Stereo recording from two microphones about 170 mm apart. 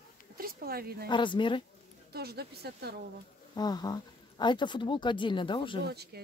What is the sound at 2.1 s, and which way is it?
Speech, 70° right (ahead or behind).